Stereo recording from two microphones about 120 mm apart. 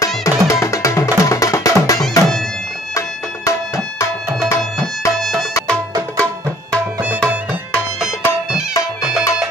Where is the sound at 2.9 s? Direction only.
25° left (ahead or behind).